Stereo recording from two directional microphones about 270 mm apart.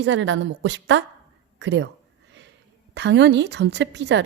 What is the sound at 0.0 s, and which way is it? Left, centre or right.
A woman's voice, right.